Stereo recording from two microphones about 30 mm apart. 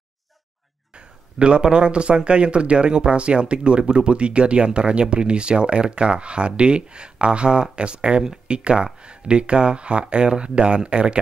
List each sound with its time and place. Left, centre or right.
0.9 s speech: right